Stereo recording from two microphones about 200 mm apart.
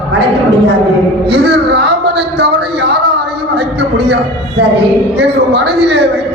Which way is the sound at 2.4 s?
55° right (ahead or behind).